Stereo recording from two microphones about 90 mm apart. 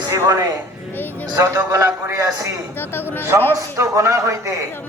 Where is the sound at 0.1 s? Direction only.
40° right (ahead or behind).